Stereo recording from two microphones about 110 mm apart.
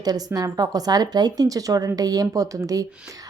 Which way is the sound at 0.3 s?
35° right (ahead or behind).